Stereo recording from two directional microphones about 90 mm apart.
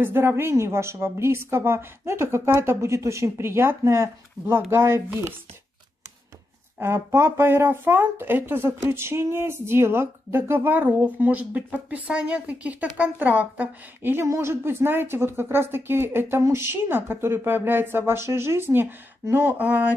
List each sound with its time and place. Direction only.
0.0 s speech: 25° right (ahead or behind)
6.8 s speech: 30° right (ahead or behind)
14.2 s speech: 30° right (ahead or behind)